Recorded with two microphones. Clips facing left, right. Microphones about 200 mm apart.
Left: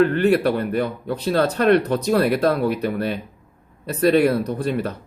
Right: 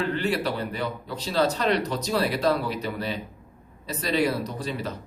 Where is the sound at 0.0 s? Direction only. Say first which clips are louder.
Left 9 dB; 55° left (ahead or behind).